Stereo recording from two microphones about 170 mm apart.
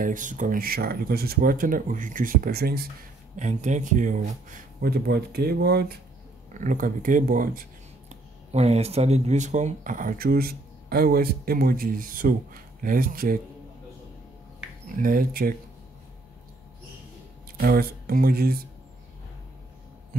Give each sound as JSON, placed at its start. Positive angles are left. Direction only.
{"t": 0.0, "sound": "speech", "side_deg": -50}
{"t": 3.3, "sound": "speech", "side_deg": -45}
{"t": 4.5, "sound": "speech", "side_deg": -65}
{"t": 6.6, "sound": "speech", "side_deg": -50}
{"t": 8.1, "sound": "speech", "side_deg": -40}
{"t": 15.0, "sound": "speech", "side_deg": -55}
{"t": 17.6, "sound": "speech", "side_deg": -60}